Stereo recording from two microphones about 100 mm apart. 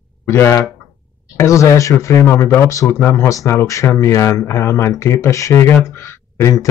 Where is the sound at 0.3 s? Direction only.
25° left (ahead or behind).